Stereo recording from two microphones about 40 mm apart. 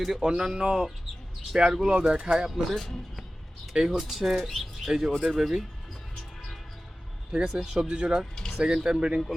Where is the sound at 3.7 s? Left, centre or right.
Centre.